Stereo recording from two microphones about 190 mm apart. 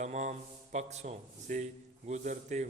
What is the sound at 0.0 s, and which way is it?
A man's voice, 40° right (ahead or behind).